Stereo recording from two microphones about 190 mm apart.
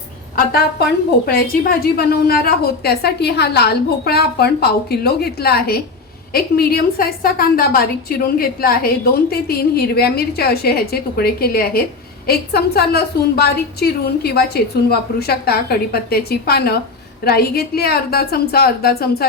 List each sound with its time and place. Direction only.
0.3 s a woman's voice: 55° left (ahead or behind)